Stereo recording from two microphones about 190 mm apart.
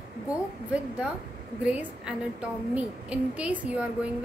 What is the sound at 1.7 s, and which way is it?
A woman's voice, 5° right (ahead or behind).